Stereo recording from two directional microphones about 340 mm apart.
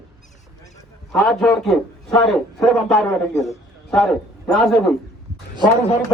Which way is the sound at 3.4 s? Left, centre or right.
Centre.